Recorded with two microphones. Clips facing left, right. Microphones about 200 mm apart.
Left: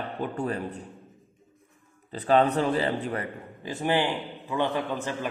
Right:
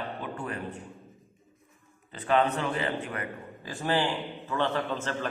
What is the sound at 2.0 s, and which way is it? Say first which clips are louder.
A man's voice: left 4 dB; 35° left (ahead or behind).